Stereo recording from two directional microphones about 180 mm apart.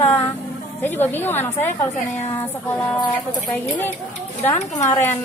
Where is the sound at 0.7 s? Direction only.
10° left (ahead or behind).